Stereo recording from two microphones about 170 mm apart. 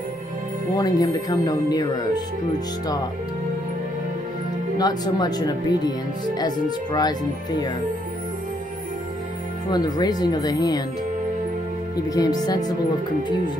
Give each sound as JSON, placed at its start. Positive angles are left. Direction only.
{"t": 0.7, "sound": "speech", "side_deg": 25}
{"t": 4.7, "sound": "speech", "side_deg": 25}
{"t": 9.7, "sound": "speech", "side_deg": 25}
{"t": 12.1, "sound": "speech", "side_deg": 20}